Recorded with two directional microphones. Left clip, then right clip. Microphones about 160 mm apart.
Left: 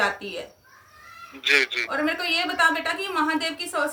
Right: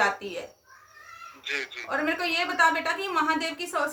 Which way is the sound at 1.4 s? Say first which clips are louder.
Left 12 dB; 55° left (ahead or behind).